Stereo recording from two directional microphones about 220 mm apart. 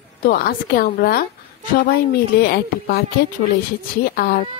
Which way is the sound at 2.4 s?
45° left (ahead or behind).